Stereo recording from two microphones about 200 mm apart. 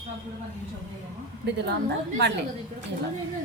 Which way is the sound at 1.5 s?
55° right (ahead or behind).